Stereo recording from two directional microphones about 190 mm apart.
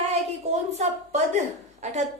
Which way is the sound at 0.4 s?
35° right (ahead or behind).